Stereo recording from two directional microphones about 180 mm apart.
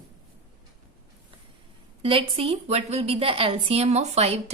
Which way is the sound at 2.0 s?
30° right (ahead or behind).